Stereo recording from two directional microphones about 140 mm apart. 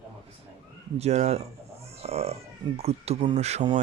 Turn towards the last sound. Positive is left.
turn(degrees=-50)  # may be behind; listen again after turning